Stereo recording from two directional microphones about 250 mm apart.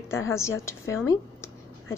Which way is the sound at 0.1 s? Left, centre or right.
Centre.